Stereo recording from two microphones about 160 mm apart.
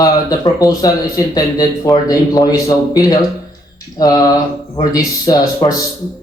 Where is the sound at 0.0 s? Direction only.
20° left (ahead or behind).